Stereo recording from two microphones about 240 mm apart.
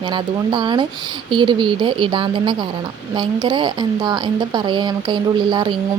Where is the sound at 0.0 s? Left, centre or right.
Centre.